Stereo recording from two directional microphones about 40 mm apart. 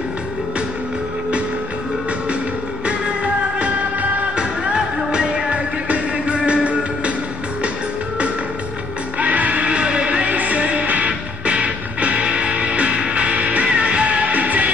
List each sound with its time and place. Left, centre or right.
2.8 s music: right
9.2 s music: right